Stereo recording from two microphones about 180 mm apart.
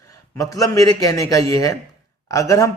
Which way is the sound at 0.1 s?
20° left (ahead or behind).